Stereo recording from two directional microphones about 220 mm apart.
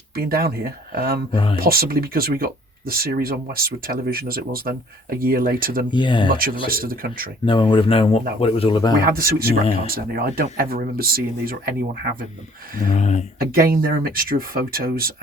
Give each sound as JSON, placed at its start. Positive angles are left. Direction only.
{"t": 0.1, "sound": "speech", "side_deg": -45}
{"t": 1.3, "sound": "speech", "side_deg": 25}
{"t": 1.5, "sound": "speech", "side_deg": -40}
{"t": 5.9, "sound": "speech", "side_deg": 20}
{"t": 6.2, "sound": "speech", "side_deg": -40}
{"t": 7.4, "sound": "speech", "side_deg": 20}
{"t": 9.0, "sound": "speech", "side_deg": -40}
{"t": 12.9, "sound": "speech", "side_deg": 30}
{"t": 13.4, "sound": "speech", "side_deg": -40}